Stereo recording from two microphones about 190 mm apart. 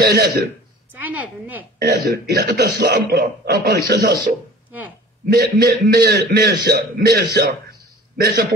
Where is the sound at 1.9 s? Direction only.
55° right (ahead or behind).